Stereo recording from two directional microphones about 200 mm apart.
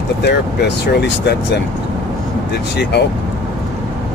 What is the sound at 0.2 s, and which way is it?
Speech, 60° left (ahead or behind).